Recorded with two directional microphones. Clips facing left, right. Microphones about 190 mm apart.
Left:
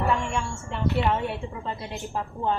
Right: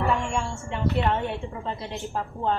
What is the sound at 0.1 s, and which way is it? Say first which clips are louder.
Speech: even; centre (ahead or behind).